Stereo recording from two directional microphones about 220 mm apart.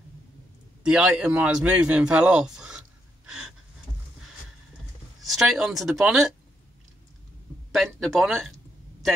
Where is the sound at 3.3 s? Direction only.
5° right (ahead or behind).